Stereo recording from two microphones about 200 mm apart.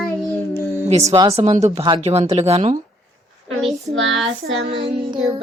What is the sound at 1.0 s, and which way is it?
Speech, 15° right (ahead or behind).